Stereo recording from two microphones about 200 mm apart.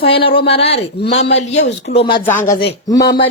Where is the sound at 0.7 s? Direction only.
60° left (ahead or behind).